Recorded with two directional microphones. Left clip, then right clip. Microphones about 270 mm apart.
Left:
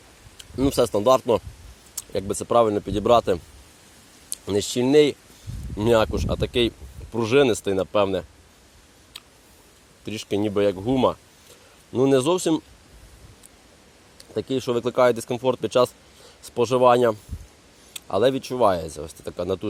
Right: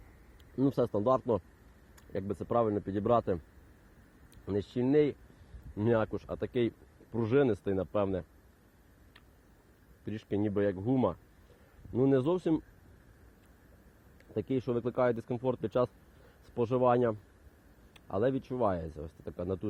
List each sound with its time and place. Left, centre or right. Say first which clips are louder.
0.6 s speech: left 10 dB; centre
4.5 s speech: left 10 dB; left
5.8 s speech: left 11 dB; centre
10.1 s speech: left 9 dB; centre
14.3 s speech: left 9 dB; centre